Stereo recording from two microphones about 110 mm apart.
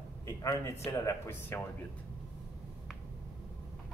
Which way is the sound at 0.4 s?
30° left (ahead or behind).